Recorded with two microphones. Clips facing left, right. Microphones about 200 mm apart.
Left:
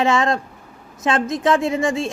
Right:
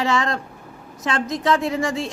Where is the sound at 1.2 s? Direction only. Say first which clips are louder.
Even; 50° left (ahead or behind).